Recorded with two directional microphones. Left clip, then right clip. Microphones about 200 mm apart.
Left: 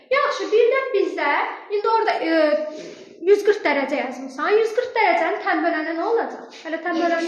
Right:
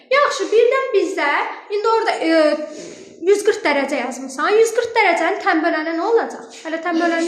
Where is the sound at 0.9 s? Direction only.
30° right (ahead or behind).